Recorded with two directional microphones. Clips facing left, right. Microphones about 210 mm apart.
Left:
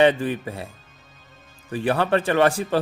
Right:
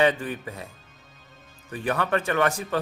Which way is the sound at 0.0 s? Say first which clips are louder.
Left 5 dB; 30° left (ahead or behind).